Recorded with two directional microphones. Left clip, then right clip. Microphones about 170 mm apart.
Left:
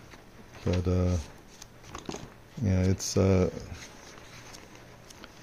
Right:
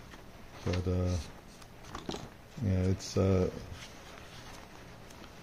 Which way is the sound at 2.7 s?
40° left (ahead or behind).